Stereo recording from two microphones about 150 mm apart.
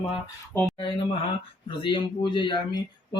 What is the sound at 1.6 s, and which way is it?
Speech, 35° left (ahead or behind).